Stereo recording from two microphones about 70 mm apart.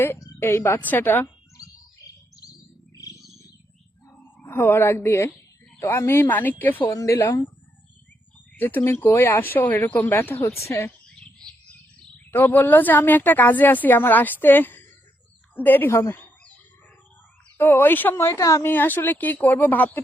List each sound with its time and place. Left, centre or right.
0.3 s a woman's voice: left
2.0 s bird: left
3.2 s bird: centre
4.4 s speech: left
6.9 s speech: left
8.5 s speech: left
11.0 s bird: centre
12.3 s speech: left
16.1 s bird: left
17.6 s speech: left
18.3 s speech: left
18.6 s speech: left